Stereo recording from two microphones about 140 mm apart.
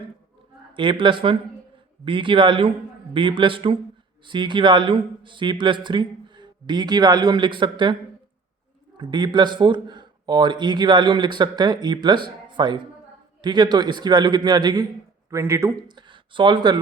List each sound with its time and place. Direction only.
0.7 s speech: 35° right (ahead or behind)
9.0 s speech: 30° right (ahead or behind)
15.9 s speech: 35° right (ahead or behind)